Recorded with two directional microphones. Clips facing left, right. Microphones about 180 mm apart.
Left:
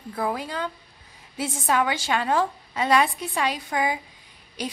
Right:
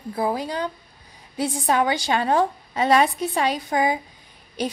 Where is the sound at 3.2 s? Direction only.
40° right (ahead or behind).